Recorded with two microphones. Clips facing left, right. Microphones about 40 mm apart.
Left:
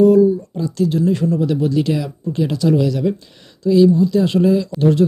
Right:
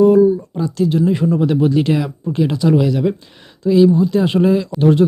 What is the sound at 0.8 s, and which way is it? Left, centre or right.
Speech, right.